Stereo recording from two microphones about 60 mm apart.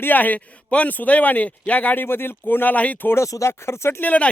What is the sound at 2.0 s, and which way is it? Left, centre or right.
Speech, left.